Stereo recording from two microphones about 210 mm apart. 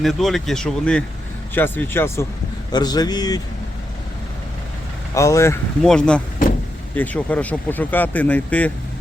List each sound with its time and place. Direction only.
0.0 s speech: centre (ahead or behind); by 3.4 s 20° left (ahead or behind)
5.1 s speech: 15° left (ahead or behind)
5.8 s speech: 5° left (ahead or behind)